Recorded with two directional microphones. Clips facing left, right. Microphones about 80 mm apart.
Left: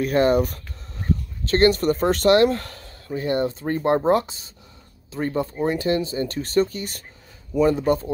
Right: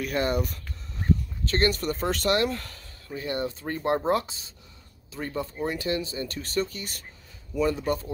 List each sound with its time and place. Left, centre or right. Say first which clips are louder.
0.0 s speech: left 8 dB; left
1.5 s speech: left 8 dB; left
2.1 s speech: left 9 dB; left